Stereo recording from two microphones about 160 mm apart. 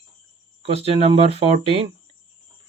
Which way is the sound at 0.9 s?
40° right (ahead or behind).